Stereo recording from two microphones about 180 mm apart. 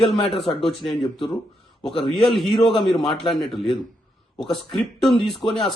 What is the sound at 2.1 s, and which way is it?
Speech, centre (ahead or behind).